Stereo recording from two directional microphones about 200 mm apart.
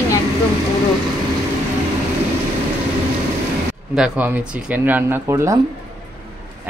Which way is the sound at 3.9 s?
5° right (ahead or behind).